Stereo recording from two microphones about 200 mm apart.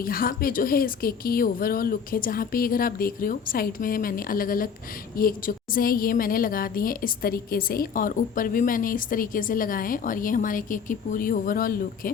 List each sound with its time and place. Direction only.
0.0 s a woman's voice: 45° left (ahead or behind)